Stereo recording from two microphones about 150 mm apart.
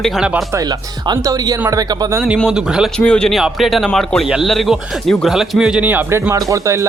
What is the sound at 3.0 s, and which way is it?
Speech, 5° left (ahead or behind).